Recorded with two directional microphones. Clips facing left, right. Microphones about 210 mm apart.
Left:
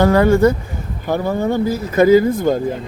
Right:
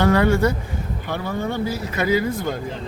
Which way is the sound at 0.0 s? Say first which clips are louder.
Left 5 dB; 40° left (ahead or behind).